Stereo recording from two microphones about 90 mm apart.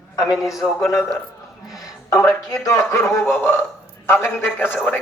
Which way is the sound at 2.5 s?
30° left (ahead or behind).